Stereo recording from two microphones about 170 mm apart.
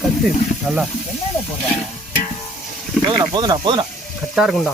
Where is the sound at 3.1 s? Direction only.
25° right (ahead or behind).